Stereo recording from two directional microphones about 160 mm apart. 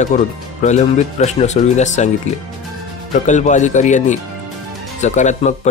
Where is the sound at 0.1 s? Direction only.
45° left (ahead or behind).